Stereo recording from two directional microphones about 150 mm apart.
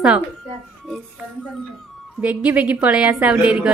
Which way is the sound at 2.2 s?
10° right (ahead or behind).